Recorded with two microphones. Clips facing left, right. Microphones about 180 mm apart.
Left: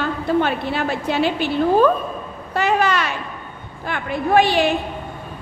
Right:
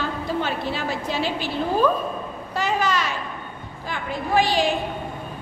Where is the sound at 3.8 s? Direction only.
60° left (ahead or behind).